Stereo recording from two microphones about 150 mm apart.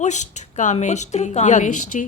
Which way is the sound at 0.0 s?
50° left (ahead or behind).